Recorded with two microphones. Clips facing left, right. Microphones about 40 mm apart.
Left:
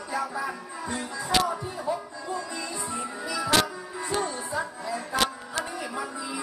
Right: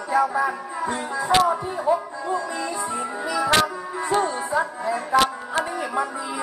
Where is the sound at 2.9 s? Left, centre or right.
Right.